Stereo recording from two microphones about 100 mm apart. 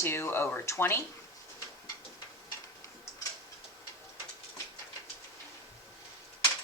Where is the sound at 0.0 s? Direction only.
25° left (ahead or behind).